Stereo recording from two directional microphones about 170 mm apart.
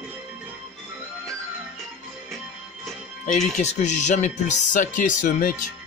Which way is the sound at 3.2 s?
45° left (ahead or behind).